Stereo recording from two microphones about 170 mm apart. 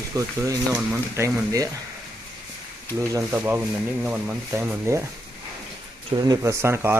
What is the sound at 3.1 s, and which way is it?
Speech, 15° right (ahead or behind).